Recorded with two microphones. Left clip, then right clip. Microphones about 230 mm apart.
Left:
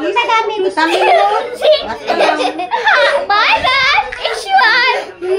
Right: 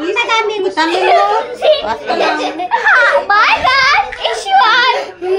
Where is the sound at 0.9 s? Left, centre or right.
Left.